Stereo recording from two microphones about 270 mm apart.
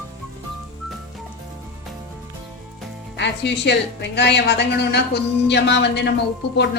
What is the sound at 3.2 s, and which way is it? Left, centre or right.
A woman's voice, left.